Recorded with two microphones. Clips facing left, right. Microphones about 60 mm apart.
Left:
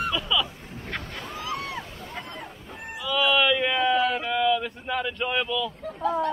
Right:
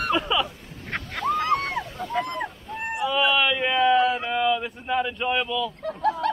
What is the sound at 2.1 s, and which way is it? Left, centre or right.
Dog, right.